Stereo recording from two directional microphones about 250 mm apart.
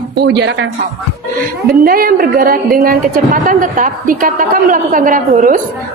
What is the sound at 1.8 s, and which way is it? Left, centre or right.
A woman's voice, right.